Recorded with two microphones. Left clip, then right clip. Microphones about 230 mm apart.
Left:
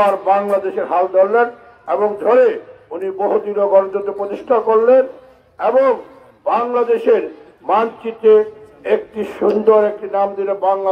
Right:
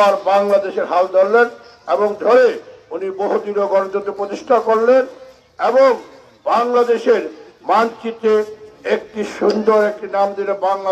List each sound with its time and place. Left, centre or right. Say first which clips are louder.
0.0 s a man's voice: right 1 dB; right